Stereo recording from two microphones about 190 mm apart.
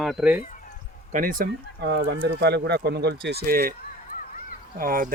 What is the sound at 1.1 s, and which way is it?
Speech, 45° right (ahead or behind).